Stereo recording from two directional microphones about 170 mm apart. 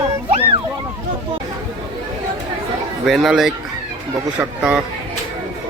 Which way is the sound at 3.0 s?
Centre (ahead or behind).